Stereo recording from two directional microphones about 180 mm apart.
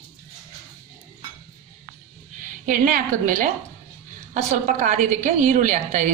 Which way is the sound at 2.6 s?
50° right (ahead or behind).